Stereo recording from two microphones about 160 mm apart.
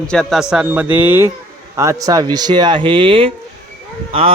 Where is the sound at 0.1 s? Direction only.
Centre (ahead or behind).